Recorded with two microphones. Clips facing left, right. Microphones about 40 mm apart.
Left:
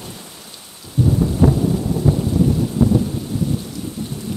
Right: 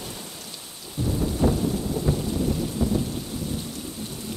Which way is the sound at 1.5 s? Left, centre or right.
Centre.